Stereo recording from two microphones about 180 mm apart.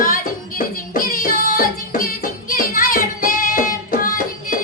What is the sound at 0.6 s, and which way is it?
Music, 50° left (ahead or behind).